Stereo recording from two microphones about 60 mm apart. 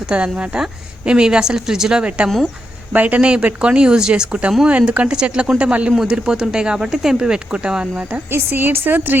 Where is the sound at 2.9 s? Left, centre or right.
Right.